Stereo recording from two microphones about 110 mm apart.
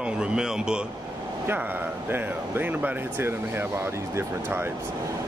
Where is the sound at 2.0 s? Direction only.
20° right (ahead or behind).